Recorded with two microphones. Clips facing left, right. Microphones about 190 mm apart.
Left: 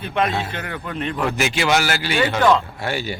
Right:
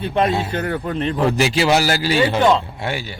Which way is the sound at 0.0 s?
35° right (ahead or behind).